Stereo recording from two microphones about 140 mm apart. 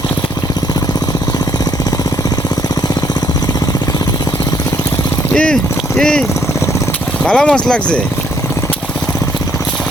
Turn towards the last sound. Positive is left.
turn(degrees=5)  # may be behind; listen again after turning